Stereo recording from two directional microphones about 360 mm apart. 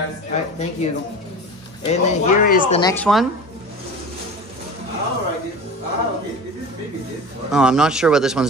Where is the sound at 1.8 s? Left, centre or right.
Centre.